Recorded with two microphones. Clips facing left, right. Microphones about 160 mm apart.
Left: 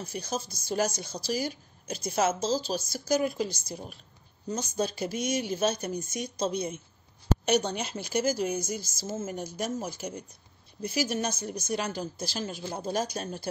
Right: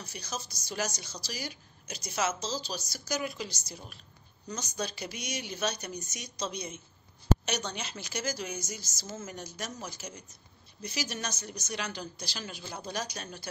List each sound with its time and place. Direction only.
0.0 s a woman's voice: 50° left (ahead or behind)